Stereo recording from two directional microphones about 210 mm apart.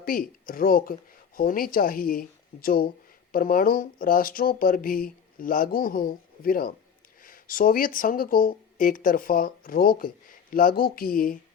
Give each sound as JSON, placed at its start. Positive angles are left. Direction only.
{"t": 0.0, "sound": "speech", "side_deg": 40}